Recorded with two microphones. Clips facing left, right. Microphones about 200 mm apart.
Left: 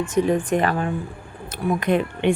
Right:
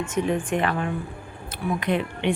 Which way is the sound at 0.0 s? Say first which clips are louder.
Left 4 dB; 35° left (ahead or behind).